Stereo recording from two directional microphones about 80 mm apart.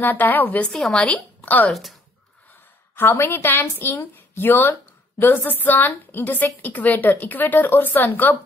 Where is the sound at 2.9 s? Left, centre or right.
Left.